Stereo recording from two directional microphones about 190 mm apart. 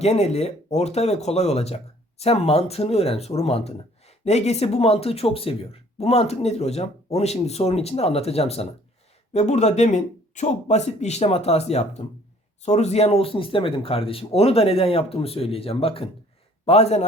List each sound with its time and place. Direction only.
0.0 s speech: 35° left (ahead or behind)